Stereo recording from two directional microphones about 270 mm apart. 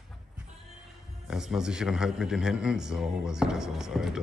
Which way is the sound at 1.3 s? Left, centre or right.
Centre.